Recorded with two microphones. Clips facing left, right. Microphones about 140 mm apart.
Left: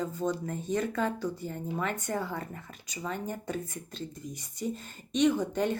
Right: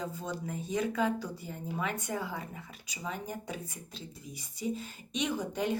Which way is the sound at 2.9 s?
10° right (ahead or behind).